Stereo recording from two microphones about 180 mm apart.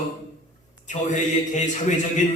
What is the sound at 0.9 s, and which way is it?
A man's voice, 45° left (ahead or behind).